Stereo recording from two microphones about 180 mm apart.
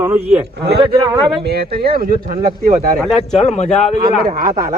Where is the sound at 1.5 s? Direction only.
60° right (ahead or behind).